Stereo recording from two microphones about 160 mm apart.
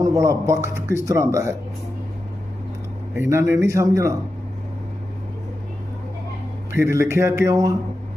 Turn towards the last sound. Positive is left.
turn(degrees=-20)  # may be behind; listen again after turning